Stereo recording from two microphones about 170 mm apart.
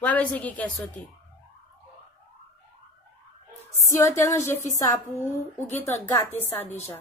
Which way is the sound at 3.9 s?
15° left (ahead or behind).